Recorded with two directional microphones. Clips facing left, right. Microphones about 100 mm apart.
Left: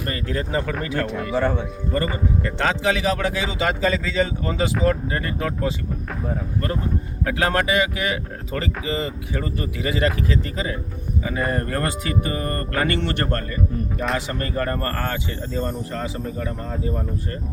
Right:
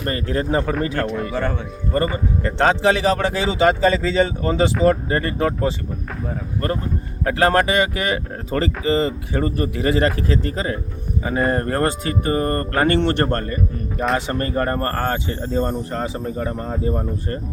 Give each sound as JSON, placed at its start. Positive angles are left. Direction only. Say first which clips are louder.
{"t": 0.1, "sound": "speech", "louder": "right 5 dB", "side_deg": -35}
{"t": 1.3, "sound": "speech", "louder": "left 2 dB", "side_deg": 10}
{"t": 2.4, "sound": "speech", "louder": "right 7 dB", "side_deg": -35}
{"t": 7.3, "sound": "speech", "louder": "right 5 dB", "side_deg": -45}